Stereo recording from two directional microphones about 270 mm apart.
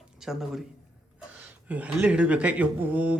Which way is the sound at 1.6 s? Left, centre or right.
Centre.